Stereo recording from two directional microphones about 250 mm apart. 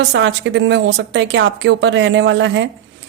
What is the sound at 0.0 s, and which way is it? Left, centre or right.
A woman's voice, right.